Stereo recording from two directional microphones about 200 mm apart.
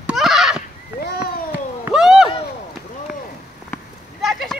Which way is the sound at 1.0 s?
50° left (ahead or behind).